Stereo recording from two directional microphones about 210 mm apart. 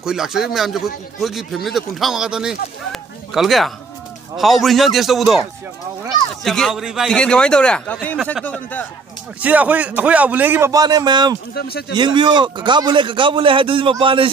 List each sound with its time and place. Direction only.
0.0 s speech: centre (ahead or behind)
6.4 s speech: centre (ahead or behind)
9.4 s a man's voice: 5° right (ahead or behind)
11.5 s speech: 45° left (ahead or behind)
11.9 s a man's voice: 20° right (ahead or behind)